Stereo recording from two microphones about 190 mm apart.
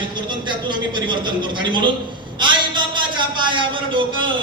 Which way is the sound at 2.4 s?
25° right (ahead or behind).